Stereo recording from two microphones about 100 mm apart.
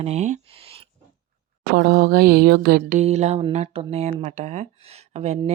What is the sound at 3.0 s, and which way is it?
Speech, 90° right.